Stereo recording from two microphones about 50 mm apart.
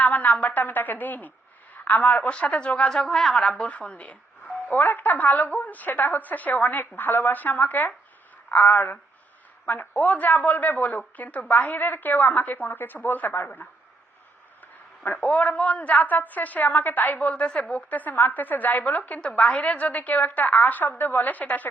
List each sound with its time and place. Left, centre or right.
0.0 s a woman's voice: left
2.9 s speech: centre
3.6 s a woman's voice: left
4.7 s a woman's voice: left
15.0 s a woman's voice: left
19.2 s a woman's voice: left